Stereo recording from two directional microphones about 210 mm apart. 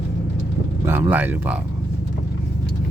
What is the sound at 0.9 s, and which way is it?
Speech, 10° right (ahead or behind).